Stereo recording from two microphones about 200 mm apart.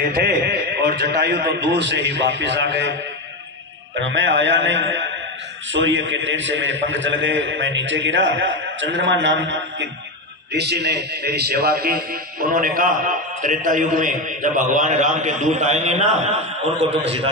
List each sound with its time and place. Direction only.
0.1 s a man's voice: 55° right (ahead or behind)
4.0 s a man's voice: 65° right (ahead or behind); by 17.3 s 30° right (ahead or behind)